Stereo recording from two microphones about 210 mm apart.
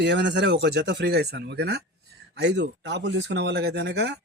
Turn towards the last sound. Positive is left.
turn(degrees=-50)  # may be behind; listen again after turning